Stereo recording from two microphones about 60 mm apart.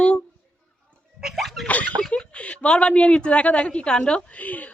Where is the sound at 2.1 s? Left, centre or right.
Centre.